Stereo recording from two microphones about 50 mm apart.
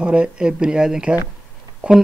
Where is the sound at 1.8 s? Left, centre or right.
Right.